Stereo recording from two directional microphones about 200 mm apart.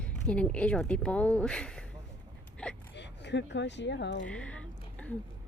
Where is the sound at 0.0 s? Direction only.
5° left (ahead or behind).